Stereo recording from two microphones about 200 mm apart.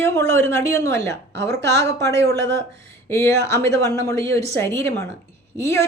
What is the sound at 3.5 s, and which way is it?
A woman's voice, 15° left (ahead or behind).